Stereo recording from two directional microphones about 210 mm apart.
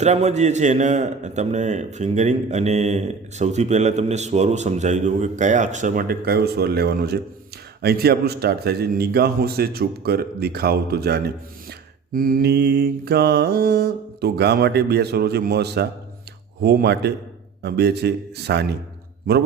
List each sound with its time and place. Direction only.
0.0 s a man's voice: 30° right (ahead or behind); by 7.2 s 50° right (ahead or behind)
7.8 s mantra: 50° right (ahead or behind)